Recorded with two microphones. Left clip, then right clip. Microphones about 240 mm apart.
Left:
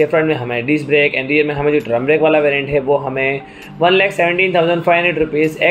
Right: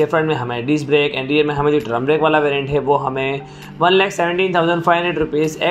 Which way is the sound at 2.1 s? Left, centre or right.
Right.